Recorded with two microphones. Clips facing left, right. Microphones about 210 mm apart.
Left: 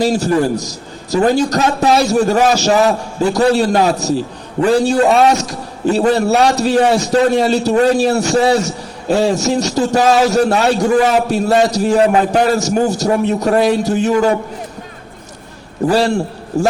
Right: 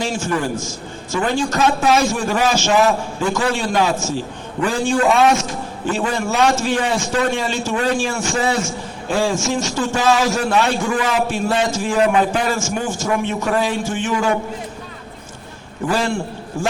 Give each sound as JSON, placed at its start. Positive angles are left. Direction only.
{"t": 0.0, "sound": "a man's voice", "side_deg": 40}
{"t": 15.9, "sound": "a man's voice", "side_deg": 35}